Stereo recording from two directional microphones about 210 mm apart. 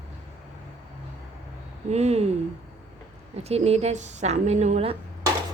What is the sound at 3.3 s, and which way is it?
A woman's voice, 30° right (ahead or behind).